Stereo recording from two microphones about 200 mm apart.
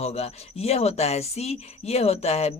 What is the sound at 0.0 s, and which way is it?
A woman's voice, 30° left (ahead or behind).